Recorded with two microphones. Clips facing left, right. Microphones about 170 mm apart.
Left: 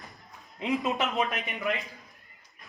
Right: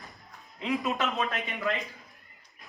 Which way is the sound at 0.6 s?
20° left (ahead or behind).